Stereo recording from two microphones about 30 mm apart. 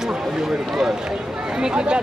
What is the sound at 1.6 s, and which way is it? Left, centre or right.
Speech, right.